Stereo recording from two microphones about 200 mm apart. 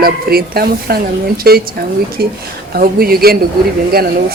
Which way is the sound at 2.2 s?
50° right (ahead or behind).